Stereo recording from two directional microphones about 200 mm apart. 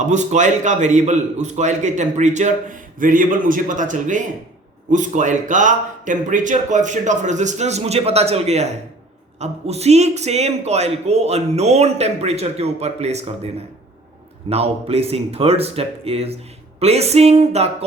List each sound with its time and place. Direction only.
0.0 s a man's voice: 35° right (ahead or behind)
14.5 s a man's voice: 30° right (ahead or behind)